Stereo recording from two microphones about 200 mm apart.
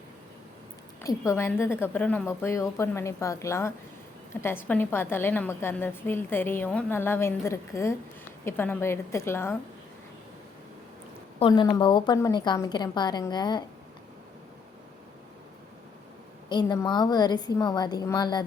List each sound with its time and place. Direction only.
1.0 s a woman's voice: 15° left (ahead or behind)
11.3 s a woman's voice: 25° left (ahead or behind)
16.5 s a woman's voice: 20° left (ahead or behind)